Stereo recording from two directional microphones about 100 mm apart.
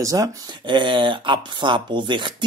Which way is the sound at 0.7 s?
50° right (ahead or behind).